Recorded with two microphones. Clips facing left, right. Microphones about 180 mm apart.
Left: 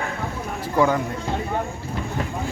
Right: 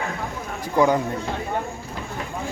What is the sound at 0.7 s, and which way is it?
Speech, 20° right (ahead or behind).